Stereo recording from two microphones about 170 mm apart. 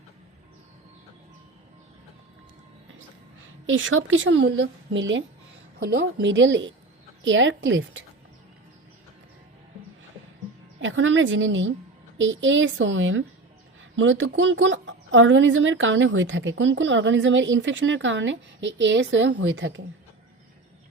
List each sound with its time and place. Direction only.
3.8 s speech: 90° right
10.8 s speech: 90° right